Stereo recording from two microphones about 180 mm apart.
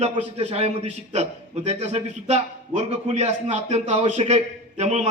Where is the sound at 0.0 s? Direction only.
40° right (ahead or behind).